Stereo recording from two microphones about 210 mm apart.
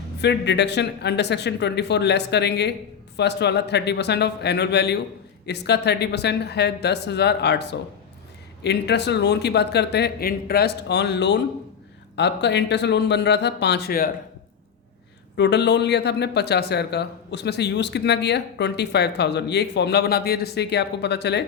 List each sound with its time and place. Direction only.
0.2 s speech: 55° left (ahead or behind)
15.4 s speech: 55° left (ahead or behind)